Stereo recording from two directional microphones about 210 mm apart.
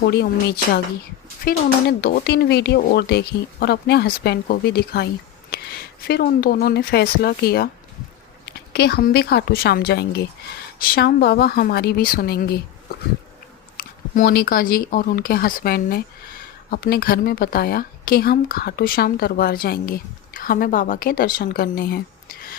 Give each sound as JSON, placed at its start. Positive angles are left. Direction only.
{"t": 0.1, "sound": "a woman's voice", "side_deg": 50}
{"t": 13.7, "sound": "a woman's voice", "side_deg": 45}